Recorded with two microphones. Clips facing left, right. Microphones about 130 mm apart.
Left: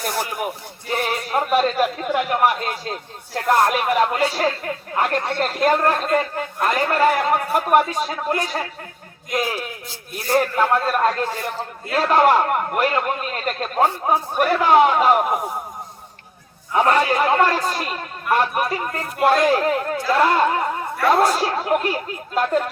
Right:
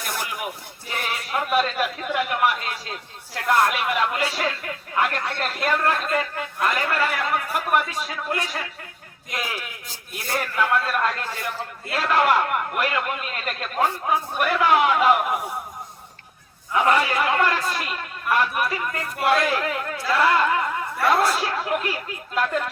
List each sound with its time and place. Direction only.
0.0 s a man's voice: 40° left (ahead or behind)
16.7 s a man's voice: 40° left (ahead or behind)